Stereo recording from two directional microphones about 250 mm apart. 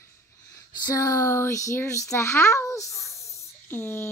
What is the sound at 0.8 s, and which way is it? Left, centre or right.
Speech, centre.